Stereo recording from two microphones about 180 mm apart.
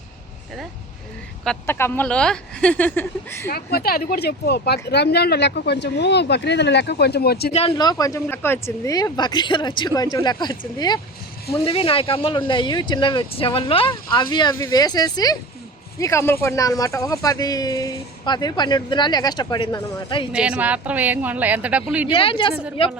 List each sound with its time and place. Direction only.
1.5 s speech: 15° left (ahead or behind)
3.5 s speech: 60° left (ahead or behind)
7.5 s speech: 30° left (ahead or behind)
20.3 s a woman's voice: 5° right (ahead or behind)
22.1 s a woman's voice: 30° left (ahead or behind)